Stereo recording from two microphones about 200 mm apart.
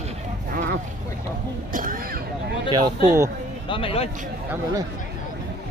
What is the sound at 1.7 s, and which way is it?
Speech, 45° right (ahead or behind).